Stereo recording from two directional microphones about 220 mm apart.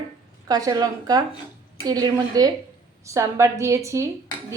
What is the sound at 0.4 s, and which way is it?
A woman's voice, 15° right (ahead or behind).